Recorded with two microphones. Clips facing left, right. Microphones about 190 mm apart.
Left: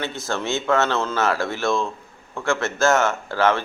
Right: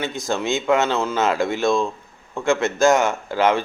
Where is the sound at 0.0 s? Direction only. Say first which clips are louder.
Right 3 dB; 15° right (ahead or behind).